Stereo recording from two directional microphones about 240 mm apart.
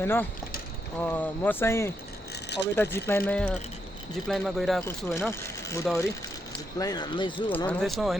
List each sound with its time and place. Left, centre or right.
0.0 s speech: centre
7.5 s speech: centre